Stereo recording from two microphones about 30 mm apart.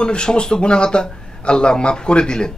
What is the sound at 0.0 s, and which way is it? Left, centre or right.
A man's voice, left.